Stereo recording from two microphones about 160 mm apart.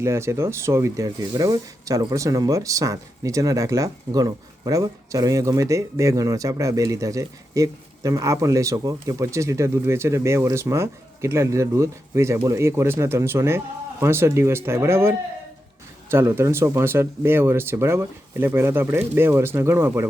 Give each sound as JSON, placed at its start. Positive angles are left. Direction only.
{"t": 0.0, "sound": "speech", "side_deg": -15}